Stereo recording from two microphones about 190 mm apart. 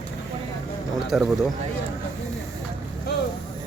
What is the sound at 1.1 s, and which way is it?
Speech, centre (ahead or behind).